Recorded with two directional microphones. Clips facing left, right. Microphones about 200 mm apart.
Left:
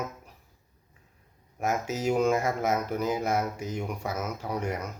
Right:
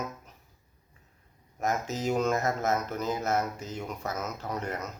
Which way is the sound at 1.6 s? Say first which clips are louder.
Left 2 dB; 10° left (ahead or behind).